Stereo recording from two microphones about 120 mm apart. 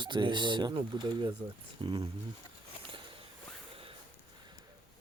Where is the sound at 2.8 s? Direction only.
50° right (ahead or behind).